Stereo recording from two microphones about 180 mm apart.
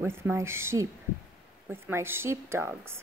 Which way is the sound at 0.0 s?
15° right (ahead or behind).